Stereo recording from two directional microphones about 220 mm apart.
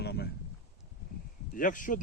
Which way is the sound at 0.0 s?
50° left (ahead or behind).